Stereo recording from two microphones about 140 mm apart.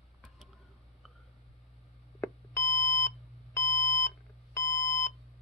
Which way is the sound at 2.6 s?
75° left (ahead or behind).